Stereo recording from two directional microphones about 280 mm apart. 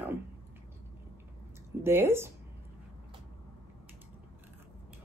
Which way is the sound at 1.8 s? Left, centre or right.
Centre.